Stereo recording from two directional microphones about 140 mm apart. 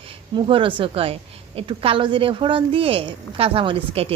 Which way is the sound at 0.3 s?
40° right (ahead or behind).